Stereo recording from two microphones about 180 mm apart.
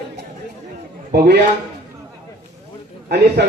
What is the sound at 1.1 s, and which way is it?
Speech, 65° right (ahead or behind).